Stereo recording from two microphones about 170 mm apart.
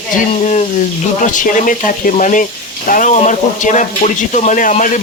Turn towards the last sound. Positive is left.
turn(degrees=50)  # may be behind; listen again after turning